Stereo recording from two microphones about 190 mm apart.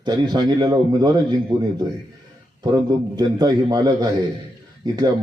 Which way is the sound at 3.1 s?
20° right (ahead or behind).